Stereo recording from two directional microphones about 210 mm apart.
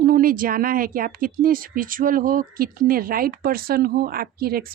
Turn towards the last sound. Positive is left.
turn(degrees=-45)  # may be behind; listen again after turning